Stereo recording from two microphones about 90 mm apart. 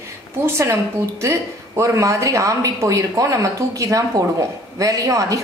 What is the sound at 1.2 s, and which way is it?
A woman's voice, 35° right (ahead or behind).